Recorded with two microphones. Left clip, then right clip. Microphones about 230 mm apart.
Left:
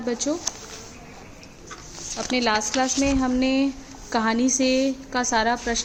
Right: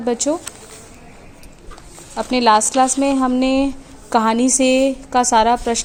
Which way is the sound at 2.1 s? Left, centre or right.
Right.